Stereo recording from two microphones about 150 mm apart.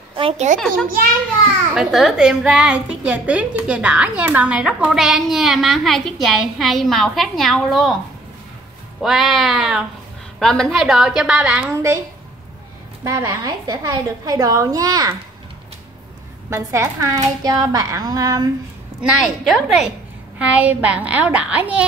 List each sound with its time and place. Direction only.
0.1 s a sound: 40° right (ahead or behind)
0.6 s a woman's voice: 5° left (ahead or behind)
9.0 s a woman's voice: centre (ahead or behind)
11.7 s a woman's voice: 20° right (ahead or behind)
13.0 s a woman's voice: 20° right (ahead or behind)
16.4 s a woman's voice: 20° right (ahead or behind)
19.0 s a woman's voice: 5° right (ahead or behind)